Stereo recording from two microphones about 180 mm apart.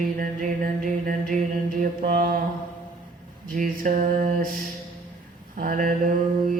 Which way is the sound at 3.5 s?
45° right (ahead or behind).